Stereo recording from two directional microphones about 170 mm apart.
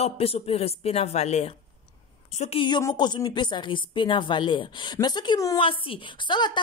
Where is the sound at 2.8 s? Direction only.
25° left (ahead or behind).